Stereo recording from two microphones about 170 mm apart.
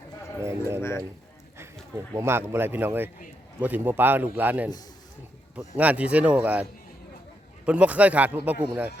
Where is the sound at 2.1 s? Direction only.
15° right (ahead or behind).